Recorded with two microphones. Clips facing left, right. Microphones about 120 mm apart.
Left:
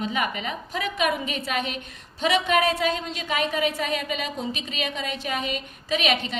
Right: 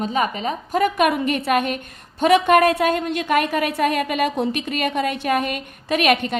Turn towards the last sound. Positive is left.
turn(degrees=-55)  # may be behind; listen again after turning